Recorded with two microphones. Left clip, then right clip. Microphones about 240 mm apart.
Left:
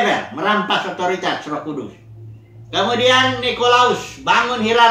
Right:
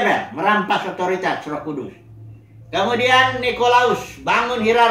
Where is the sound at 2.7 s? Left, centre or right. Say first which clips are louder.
Left 1 dB; centre.